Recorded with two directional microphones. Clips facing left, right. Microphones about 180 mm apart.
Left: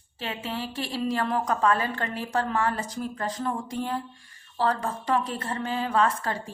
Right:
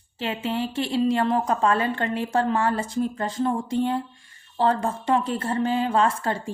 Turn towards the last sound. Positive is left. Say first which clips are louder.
# right 3 dB
turn(degrees=-30)  # may be behind; listen again after turning